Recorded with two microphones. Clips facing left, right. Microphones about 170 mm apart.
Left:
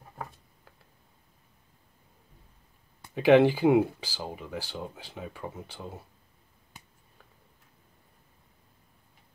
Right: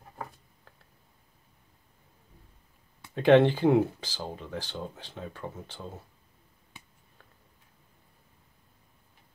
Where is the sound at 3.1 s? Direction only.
5° left (ahead or behind).